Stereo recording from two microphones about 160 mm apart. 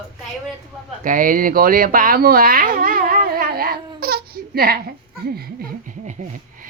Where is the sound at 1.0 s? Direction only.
55° right (ahead or behind).